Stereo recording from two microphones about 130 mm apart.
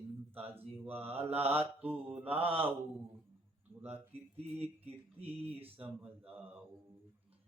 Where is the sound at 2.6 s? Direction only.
15° right (ahead or behind).